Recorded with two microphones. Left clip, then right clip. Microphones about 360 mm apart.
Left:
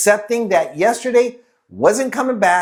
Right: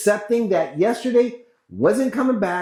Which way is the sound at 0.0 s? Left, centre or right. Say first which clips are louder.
Left 4 dB; left.